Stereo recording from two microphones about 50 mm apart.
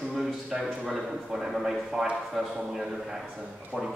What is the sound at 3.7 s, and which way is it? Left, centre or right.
Speech, right.